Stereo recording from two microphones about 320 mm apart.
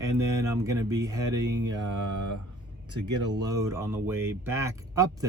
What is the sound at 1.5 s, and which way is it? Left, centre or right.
Mantra, right.